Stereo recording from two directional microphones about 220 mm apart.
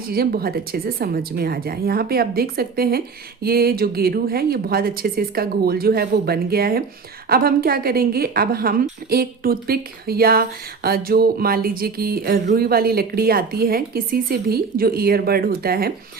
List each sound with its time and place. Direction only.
0.1 s speech: 45° right (ahead or behind)